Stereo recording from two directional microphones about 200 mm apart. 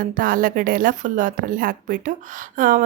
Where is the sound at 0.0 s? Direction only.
45° right (ahead or behind).